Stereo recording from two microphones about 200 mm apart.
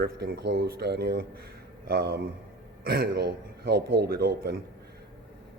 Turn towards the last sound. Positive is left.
turn(degrees=-55)  # may be behind; listen again after turning